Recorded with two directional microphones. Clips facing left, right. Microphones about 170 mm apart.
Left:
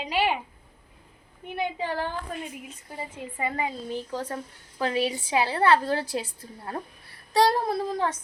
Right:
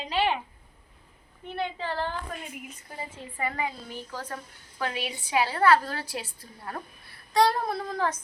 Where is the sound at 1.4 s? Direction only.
15° left (ahead or behind).